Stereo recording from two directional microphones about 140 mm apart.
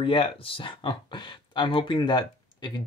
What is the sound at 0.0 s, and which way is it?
Speech, 40° left (ahead or behind).